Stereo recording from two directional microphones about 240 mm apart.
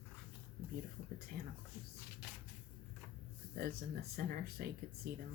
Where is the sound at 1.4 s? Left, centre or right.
Right.